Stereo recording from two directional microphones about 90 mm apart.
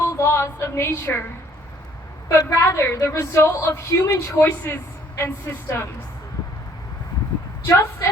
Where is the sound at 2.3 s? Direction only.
35° left (ahead or behind).